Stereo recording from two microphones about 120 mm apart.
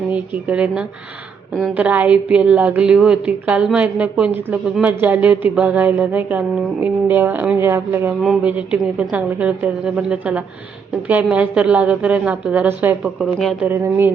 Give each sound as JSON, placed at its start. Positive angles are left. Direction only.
{"t": 0.1, "sound": "a woman's voice", "side_deg": -10}
{"t": 8.2, "sound": "a woman's voice", "side_deg": -10}
{"t": 13.1, "sound": "speech", "side_deg": 0}